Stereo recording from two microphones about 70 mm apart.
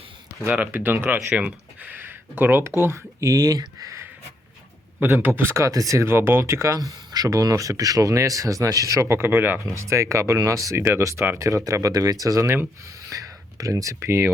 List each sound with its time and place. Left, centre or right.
0.7 s speech: right
2.8 s speech: right
5.4 s speech: right
6.1 s speech: right
9.0 s speech: right
9.7 s speech: right
13.1 s a sound: right